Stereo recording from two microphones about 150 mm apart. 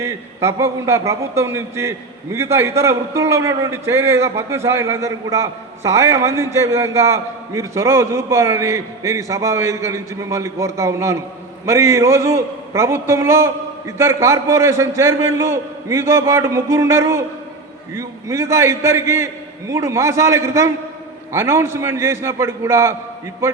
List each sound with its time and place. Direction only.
0.0 s a man's voice: 20° right (ahead or behind)